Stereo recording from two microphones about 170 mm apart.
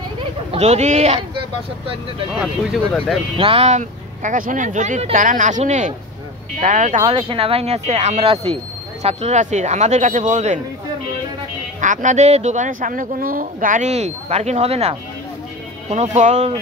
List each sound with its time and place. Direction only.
0.2 s a sound: 35° right (ahead or behind)
2.3 s speech: centre (ahead or behind)
3.3 s speech: 35° right (ahead or behind)
11.8 s speech: 45° right (ahead or behind)
16.2 s speech: 45° right (ahead or behind)